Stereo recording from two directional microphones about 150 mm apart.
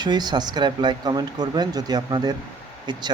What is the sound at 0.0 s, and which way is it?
Speech, 30° right (ahead or behind).